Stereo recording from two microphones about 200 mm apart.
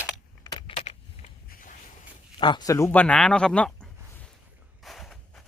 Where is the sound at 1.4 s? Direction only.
45° left (ahead or behind).